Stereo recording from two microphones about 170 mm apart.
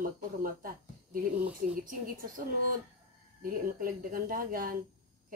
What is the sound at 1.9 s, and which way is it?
Speech, 55° right (ahead or behind).